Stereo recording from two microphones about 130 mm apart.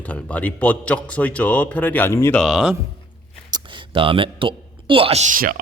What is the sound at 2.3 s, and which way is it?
Speech, centre (ahead or behind).